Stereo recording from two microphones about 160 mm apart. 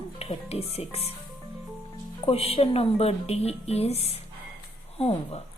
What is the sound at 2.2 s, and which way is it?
Speech, 40° left (ahead or behind).